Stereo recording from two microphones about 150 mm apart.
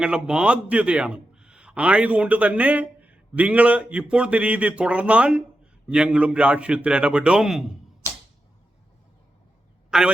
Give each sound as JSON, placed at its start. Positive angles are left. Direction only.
{"t": 0.0, "sound": "a man's voice", "side_deg": -5}
{"t": 8.0, "sound": "arrow", "side_deg": 20}
{"t": 9.9, "sound": "speech", "side_deg": -5}